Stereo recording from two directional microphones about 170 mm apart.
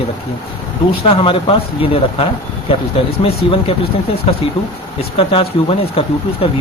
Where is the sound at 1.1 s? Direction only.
30° left (ahead or behind).